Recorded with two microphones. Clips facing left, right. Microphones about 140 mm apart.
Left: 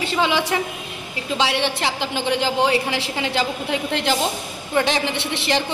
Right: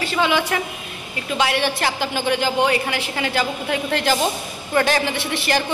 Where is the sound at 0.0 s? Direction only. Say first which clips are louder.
Right 1 dB; 25° left (ahead or behind).